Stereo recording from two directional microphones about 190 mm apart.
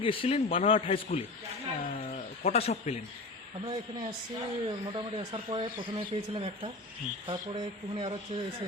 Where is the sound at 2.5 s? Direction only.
35° left (ahead or behind).